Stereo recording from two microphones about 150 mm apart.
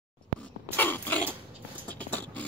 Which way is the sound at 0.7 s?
15° left (ahead or behind).